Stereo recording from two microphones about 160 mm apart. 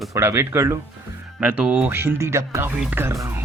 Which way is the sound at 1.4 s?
10° right (ahead or behind).